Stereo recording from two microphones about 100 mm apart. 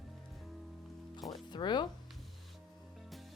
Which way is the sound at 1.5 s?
50° left (ahead or behind).